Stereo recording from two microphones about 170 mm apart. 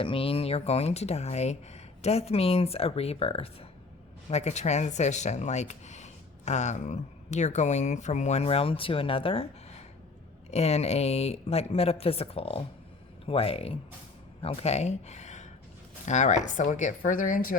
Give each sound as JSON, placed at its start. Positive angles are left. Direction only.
{"t": 0.0, "sound": "speech", "side_deg": 30}